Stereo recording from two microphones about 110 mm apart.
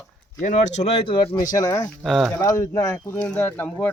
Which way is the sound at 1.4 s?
30° left (ahead or behind).